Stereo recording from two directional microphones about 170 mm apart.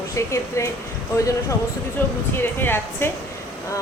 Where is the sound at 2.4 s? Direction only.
10° left (ahead or behind).